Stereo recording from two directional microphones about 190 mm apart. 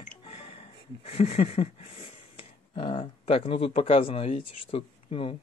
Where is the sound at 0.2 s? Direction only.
30° left (ahead or behind).